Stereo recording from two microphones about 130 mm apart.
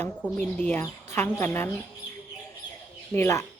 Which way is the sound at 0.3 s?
15° left (ahead or behind).